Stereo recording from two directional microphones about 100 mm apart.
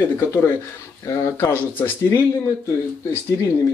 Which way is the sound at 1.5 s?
20° left (ahead or behind).